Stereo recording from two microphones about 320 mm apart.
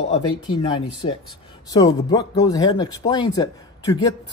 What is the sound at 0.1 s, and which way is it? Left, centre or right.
Speech, centre.